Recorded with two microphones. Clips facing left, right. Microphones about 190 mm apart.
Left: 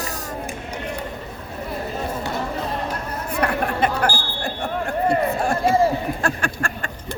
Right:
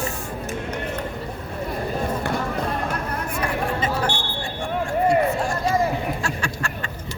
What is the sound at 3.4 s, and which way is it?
Chatter, 65° left (ahead or behind).